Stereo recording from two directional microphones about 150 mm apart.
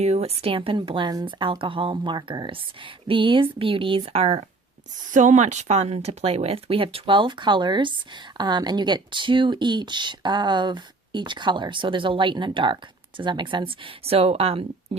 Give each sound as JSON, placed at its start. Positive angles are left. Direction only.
{"t": 0.0, "sound": "speech", "side_deg": -45}
{"t": 5.1, "sound": "speech", "side_deg": -55}